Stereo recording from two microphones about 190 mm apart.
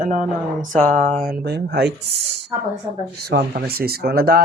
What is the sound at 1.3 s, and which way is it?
Speech, 55° right (ahead or behind).